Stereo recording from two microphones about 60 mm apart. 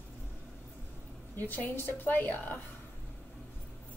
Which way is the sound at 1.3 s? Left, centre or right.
Left.